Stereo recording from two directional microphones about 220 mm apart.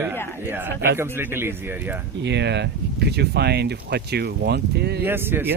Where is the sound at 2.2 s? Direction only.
50° right (ahead or behind).